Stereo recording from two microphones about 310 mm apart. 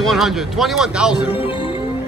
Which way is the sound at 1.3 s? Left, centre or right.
Centre.